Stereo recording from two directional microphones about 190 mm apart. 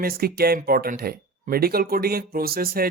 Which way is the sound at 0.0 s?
55° right (ahead or behind).